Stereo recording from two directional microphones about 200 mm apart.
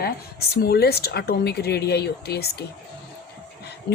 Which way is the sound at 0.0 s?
50° left (ahead or behind).